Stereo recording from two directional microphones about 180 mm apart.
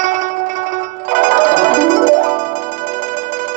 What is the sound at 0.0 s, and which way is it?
Music, 45° right (ahead or behind).